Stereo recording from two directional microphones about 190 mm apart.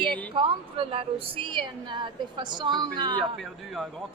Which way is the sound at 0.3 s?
30° right (ahead or behind).